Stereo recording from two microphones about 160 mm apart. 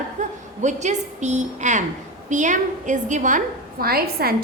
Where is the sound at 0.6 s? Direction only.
50° right (ahead or behind).